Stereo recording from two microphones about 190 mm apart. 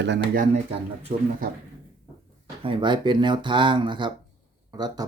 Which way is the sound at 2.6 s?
25° right (ahead or behind).